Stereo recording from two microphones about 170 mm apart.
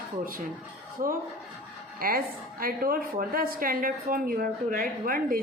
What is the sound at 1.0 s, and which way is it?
A woman's voice, 50° right (ahead or behind).